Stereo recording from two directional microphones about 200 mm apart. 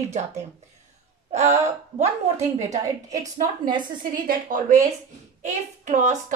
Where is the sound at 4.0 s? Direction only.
45° right (ahead or behind).